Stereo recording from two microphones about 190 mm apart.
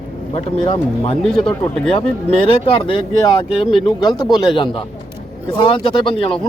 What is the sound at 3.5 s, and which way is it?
Speech, 5° right (ahead or behind).